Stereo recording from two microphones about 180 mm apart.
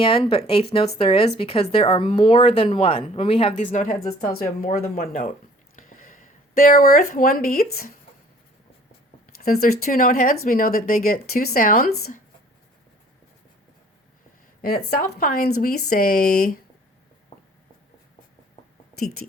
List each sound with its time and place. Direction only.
0.0 s a woman's voice: 30° left (ahead or behind)
3.7 s speech: 50° left (ahead or behind)
9.2 s speech: 55° left (ahead or behind)
14.6 s speech: 55° left (ahead or behind)